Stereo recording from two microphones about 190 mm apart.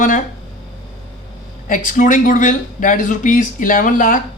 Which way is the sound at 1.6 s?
45° left (ahead or behind).